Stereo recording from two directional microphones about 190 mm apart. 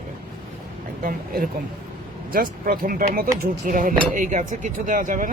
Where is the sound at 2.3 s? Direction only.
50° right (ahead or behind).